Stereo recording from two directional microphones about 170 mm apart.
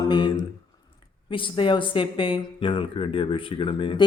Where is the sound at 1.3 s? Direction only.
30° left (ahead or behind).